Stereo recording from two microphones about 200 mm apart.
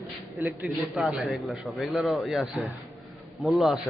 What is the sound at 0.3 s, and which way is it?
A man's voice, 10° right (ahead or behind).